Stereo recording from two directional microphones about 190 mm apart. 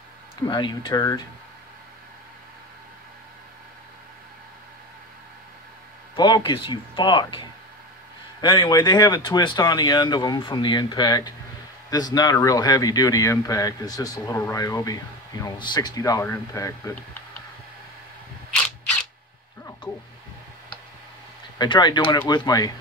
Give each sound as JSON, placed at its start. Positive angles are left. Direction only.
{"t": 0.4, "sound": "speech", "side_deg": 20}
{"t": 6.1, "sound": "speech", "side_deg": 25}
{"t": 21.5, "sound": "speech", "side_deg": 20}